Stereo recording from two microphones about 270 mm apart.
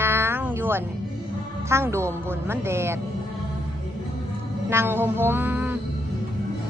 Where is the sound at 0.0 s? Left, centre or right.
Centre.